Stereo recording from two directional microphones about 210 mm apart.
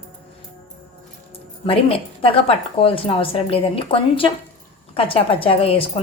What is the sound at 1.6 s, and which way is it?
A woman's voice, 25° left (ahead or behind).